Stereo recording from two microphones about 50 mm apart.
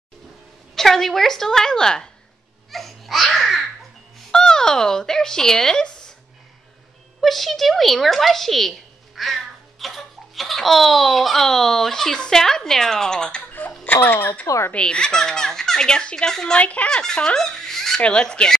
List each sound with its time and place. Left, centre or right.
0.7 s speech: centre
2.7 s babbling: centre
4.3 s speech: centre
7.2 s speech: centre
13.5 s a sound: left
13.9 s speech: left
14.7 s speech: centre
16.5 s speech: left
16.9 s speech: centre
18.0 s speech: centre